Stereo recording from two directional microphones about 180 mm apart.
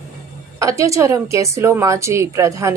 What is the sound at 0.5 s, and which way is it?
A woman's voice, 20° right (ahead or behind).